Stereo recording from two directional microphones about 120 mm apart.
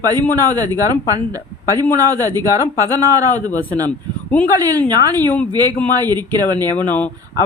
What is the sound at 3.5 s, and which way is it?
Speech, 15° left (ahead or behind).